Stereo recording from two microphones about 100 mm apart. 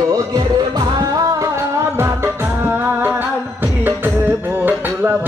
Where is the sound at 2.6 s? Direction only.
20° right (ahead or behind).